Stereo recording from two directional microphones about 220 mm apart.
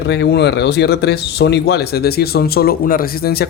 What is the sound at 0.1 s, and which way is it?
Speech, 50° left (ahead or behind).